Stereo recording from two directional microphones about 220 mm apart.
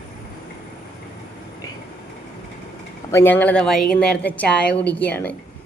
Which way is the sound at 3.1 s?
10° left (ahead or behind).